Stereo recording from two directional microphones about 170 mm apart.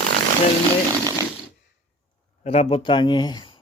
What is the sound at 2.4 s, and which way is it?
Speech, 35° left (ahead or behind).